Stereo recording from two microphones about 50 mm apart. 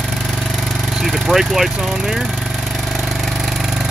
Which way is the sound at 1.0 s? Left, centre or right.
Centre.